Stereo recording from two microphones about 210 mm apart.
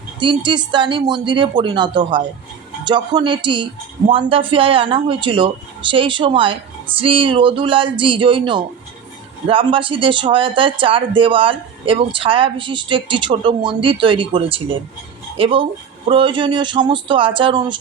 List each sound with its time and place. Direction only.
0.2 s speech: 20° right (ahead or behind)